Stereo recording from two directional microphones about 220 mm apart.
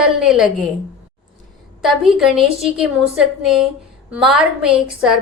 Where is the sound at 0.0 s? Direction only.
Centre (ahead or behind).